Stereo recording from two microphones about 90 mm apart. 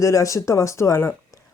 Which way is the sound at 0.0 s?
35° left (ahead or behind).